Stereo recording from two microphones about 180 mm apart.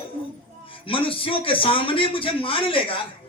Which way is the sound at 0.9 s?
30° left (ahead or behind).